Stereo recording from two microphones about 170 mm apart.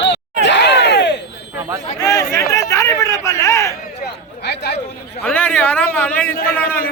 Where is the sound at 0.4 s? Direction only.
85° left.